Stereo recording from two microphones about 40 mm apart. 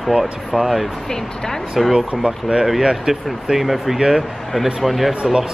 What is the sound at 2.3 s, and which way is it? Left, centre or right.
A woman's voice, centre.